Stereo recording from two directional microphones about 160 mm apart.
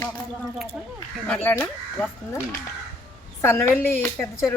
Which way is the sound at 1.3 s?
10° left (ahead or behind).